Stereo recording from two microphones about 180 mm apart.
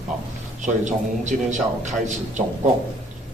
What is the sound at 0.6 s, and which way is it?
A man's voice, 40° right (ahead or behind).